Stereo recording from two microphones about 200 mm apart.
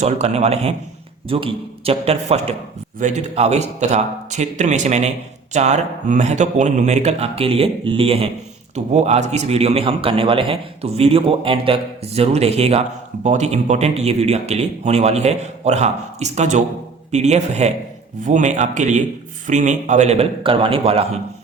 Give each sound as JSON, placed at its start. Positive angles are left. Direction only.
{"t": 0.0, "sound": "a man's voice", "side_deg": -35}